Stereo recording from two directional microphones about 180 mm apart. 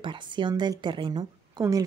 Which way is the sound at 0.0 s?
25° right (ahead or behind).